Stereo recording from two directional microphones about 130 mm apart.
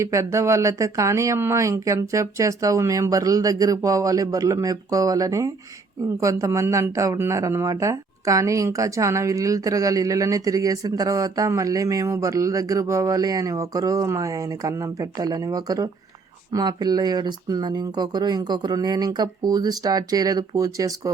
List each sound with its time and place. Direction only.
0.0 s speech: 25° right (ahead or behind)